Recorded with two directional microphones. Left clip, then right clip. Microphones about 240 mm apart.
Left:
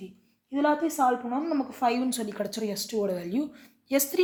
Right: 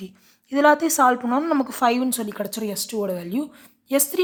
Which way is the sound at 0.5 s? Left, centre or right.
Right.